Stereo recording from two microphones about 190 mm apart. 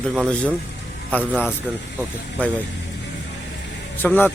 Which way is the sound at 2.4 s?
10° left (ahead or behind).